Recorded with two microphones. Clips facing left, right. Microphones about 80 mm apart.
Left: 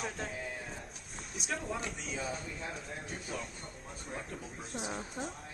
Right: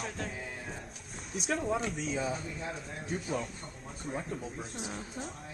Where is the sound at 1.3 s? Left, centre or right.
Centre.